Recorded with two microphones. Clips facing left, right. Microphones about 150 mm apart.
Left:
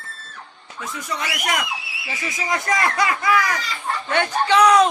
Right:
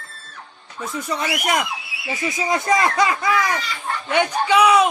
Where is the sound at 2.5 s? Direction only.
25° right (ahead or behind).